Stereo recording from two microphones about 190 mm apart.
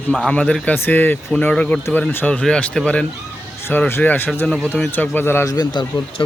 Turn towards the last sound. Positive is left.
turn(degrees=25)  # may be behind; listen again after turning